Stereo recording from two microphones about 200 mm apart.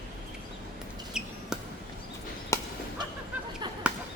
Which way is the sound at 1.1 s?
5° right (ahead or behind).